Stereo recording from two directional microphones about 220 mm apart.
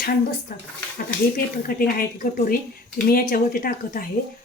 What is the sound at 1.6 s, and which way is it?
Speech, 40° left (ahead or behind).